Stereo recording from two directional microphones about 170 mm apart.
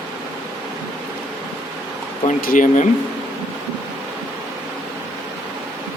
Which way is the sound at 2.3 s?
55° left (ahead or behind).